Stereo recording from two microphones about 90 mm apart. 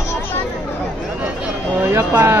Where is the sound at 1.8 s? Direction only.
30° right (ahead or behind).